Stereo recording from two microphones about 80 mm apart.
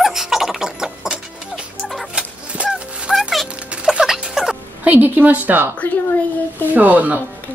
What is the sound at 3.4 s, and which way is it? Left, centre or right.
Rodents, centre.